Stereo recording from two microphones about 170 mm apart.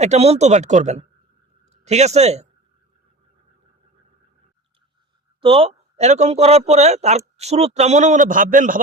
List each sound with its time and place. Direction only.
0.0 s a man's voice: 40° right (ahead or behind)
5.4 s a man's voice: 30° right (ahead or behind); by 8.8 s 50° right (ahead or behind)